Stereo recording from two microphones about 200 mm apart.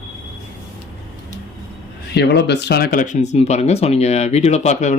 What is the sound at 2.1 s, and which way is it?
Speech, 55° left (ahead or behind).